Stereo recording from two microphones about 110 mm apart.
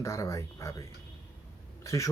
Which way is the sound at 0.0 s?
25° left (ahead or behind).